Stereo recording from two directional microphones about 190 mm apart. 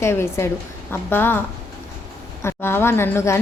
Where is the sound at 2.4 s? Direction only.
10° left (ahead or behind).